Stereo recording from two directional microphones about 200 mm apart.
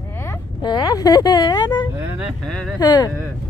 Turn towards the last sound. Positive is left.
turn(degrees=20)  # may be behind; listen again after turning